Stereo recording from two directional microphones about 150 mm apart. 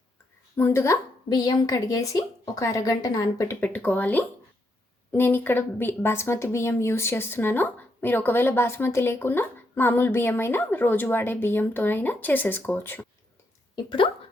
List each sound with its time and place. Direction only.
0.5 s speech: 15° left (ahead or behind)
1.3 s a woman's voice: 30° left (ahead or behind)
13.7 s speech: 35° left (ahead or behind)